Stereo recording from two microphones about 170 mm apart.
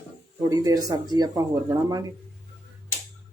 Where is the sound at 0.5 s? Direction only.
20° right (ahead or behind).